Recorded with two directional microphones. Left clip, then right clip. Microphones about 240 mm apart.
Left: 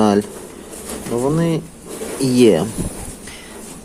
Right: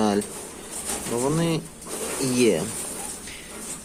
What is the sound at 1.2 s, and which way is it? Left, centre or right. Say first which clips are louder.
Speech: left 6 dB; centre.